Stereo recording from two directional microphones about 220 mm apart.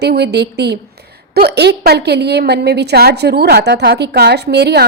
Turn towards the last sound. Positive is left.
turn(degrees=-50)  # may be behind; listen again after turning